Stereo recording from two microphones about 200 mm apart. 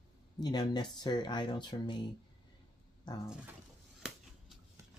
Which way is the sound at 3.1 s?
20° left (ahead or behind).